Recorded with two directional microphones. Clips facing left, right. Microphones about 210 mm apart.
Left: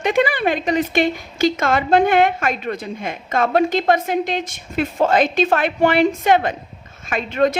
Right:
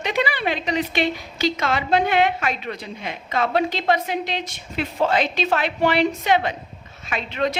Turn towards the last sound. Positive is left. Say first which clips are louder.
# left 6 dB
turn(degrees=50)  # may be behind; listen again after turning